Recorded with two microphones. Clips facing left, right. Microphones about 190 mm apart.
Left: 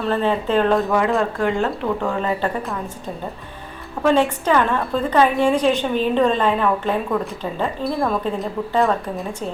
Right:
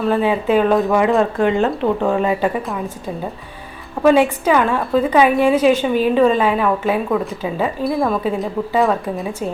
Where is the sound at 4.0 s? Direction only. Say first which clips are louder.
Right 4 dB; 5° right (ahead or behind).